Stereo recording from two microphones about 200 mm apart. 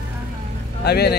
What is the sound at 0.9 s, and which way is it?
Speech, 55° left (ahead or behind).